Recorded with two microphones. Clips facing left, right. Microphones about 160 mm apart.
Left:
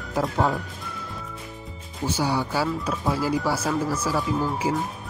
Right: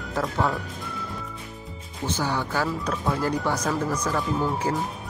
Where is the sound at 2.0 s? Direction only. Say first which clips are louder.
Left 2 dB; 10° left (ahead or behind).